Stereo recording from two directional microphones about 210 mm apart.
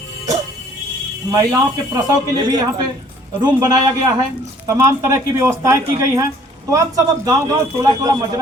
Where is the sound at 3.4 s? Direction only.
20° right (ahead or behind).